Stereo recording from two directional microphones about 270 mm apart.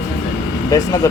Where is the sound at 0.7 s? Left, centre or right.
Centre.